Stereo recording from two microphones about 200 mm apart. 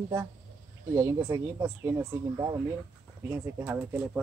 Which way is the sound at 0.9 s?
15° right (ahead or behind).